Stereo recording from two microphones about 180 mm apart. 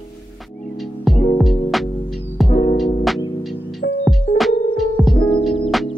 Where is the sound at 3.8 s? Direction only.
80° left.